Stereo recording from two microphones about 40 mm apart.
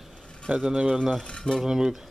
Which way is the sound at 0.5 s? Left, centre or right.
Right.